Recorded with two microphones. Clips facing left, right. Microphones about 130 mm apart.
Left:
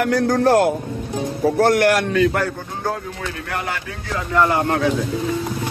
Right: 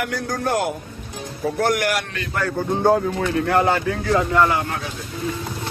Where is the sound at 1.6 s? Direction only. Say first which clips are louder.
Left 5 dB; 60° left (ahead or behind).